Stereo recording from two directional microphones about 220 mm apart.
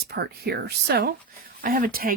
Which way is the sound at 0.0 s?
45° right (ahead or behind).